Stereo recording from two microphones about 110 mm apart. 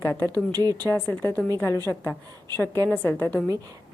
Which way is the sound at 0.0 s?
20° left (ahead or behind).